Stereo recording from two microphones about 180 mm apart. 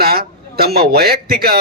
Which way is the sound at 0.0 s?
60° right (ahead or behind).